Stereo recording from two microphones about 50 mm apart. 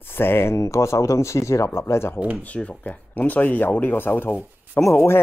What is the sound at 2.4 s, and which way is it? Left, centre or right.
Speech, left.